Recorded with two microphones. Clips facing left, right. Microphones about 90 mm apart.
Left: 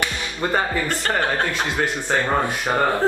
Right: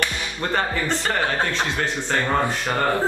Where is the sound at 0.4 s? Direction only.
10° left (ahead or behind).